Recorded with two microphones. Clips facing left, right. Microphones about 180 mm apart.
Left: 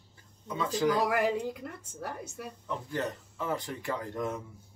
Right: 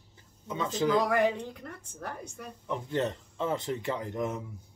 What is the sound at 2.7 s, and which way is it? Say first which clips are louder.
Speech: right 4 dB; 25° right (ahead or behind).